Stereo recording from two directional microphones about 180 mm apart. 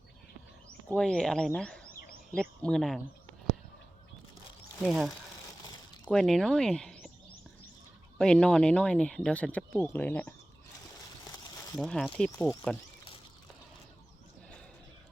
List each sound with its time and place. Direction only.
0.9 s speech: 5° left (ahead or behind)
1.9 s a sound: 50° left (ahead or behind)
2.3 s speech: 5° left (ahead or behind)
4.8 s speech: centre (ahead or behind)
8.2 s speech: 5° left (ahead or behind)
11.3 s a sound: 20° left (ahead or behind)
11.8 s speech: 5° left (ahead or behind)